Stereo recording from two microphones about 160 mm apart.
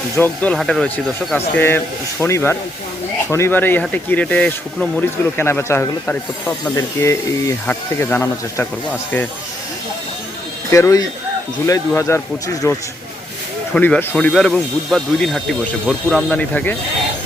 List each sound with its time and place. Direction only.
0.2 s speech: 5° left (ahead or behind)
1.5 s speech: 15° left (ahead or behind)
10.7 s speech: 20° left (ahead or behind)